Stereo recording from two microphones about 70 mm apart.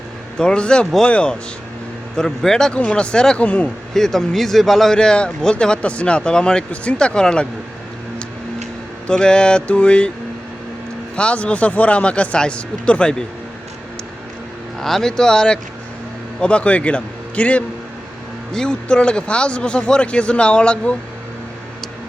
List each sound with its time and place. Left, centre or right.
0.3 s speech: centre
3.9 s speech: centre
9.0 s speech: centre
11.2 s speech: centre
14.8 s speech: centre